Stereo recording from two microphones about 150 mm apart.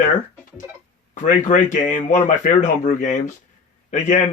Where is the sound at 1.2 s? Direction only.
60° left (ahead or behind).